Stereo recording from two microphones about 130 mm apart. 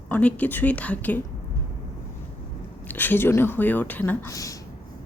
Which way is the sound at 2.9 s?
15° left (ahead or behind).